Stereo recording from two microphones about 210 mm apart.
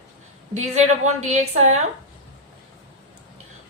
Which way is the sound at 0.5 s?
30° right (ahead or behind).